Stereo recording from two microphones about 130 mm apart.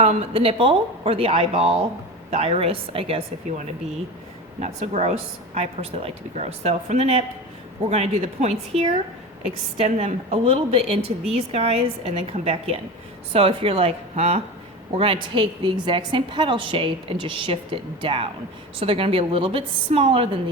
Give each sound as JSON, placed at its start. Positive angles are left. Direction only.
{"t": 0.0, "sound": "speech", "side_deg": -55}
{"t": 4.6, "sound": "a woman's voice", "side_deg": -55}